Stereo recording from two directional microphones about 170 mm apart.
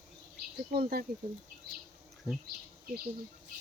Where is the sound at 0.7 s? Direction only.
60° right (ahead or behind).